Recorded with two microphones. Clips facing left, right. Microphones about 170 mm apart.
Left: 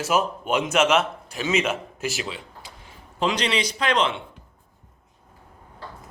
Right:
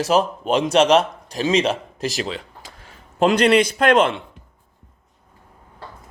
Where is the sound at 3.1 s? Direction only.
50° right (ahead or behind).